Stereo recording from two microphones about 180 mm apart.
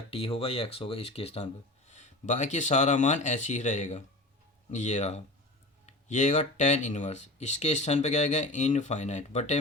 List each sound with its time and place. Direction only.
0.1 s speech: 30° left (ahead or behind)